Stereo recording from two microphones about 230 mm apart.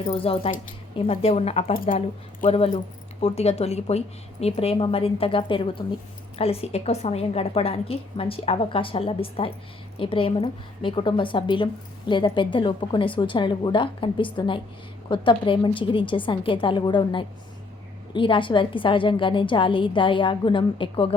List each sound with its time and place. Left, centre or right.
0.1 s a woman's voice: left